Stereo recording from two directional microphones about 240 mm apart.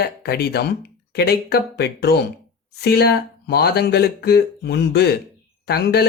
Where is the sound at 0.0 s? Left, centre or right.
Left.